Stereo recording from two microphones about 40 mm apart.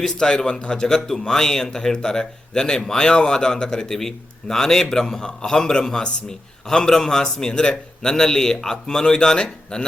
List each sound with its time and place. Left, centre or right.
0.0 s speech: centre